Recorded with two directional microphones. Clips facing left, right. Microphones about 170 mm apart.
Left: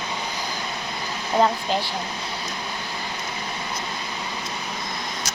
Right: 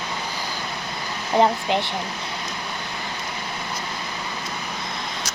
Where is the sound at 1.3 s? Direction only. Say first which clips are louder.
Right 2 dB; 20° right (ahead or behind).